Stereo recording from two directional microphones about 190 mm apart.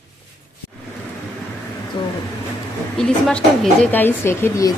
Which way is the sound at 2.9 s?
5° left (ahead or behind).